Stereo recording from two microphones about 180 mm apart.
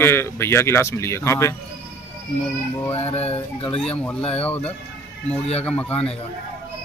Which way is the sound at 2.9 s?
35° left (ahead or behind).